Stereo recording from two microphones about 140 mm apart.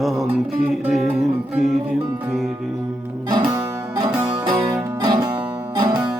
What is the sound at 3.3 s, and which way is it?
Music, 30° right (ahead or behind).